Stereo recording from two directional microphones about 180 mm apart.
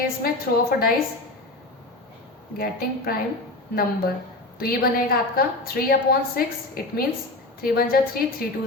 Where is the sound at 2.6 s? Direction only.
55° left (ahead or behind).